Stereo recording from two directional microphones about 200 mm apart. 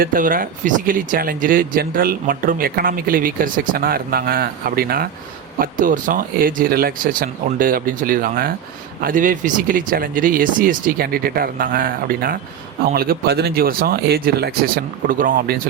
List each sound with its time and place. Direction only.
0.0 s speech: 45° right (ahead or behind)